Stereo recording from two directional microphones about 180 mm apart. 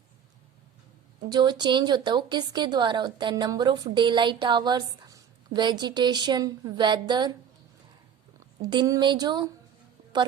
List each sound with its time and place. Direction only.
1.3 s a woman's voice: 25° right (ahead or behind)
8.6 s a woman's voice: 20° right (ahead or behind)